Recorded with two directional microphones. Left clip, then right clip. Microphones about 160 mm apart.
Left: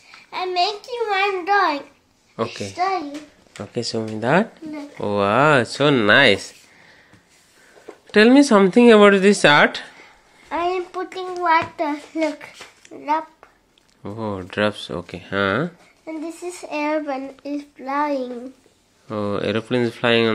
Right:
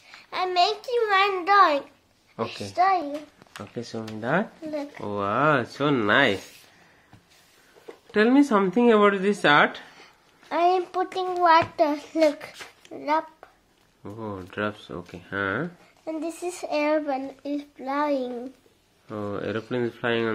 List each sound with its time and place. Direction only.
0.3 s speech: 25° right (ahead or behind)
3.7 s speech: 30° left (ahead or behind)
8.1 s speech: 40° left (ahead or behind)
10.5 s a sound: 35° right (ahead or behind)
11.7 s a child's voice: 45° right (ahead or behind)
12.9 s a child's voice: 35° right (ahead or behind)
14.0 s speech: 40° left (ahead or behind)
16.1 s speech: 40° right (ahead or behind); by 18.2 s 20° right (ahead or behind)
19.0 s speech: 40° left (ahead or behind)